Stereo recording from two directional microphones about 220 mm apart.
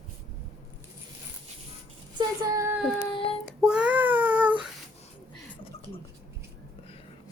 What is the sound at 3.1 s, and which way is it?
Child singing, 25° left (ahead or behind).